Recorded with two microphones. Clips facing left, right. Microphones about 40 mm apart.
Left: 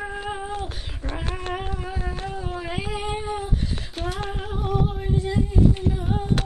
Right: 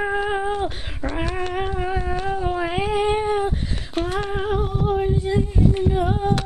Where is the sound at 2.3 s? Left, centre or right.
Right.